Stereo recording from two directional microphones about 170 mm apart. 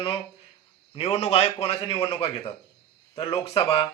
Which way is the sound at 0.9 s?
35° left (ahead or behind).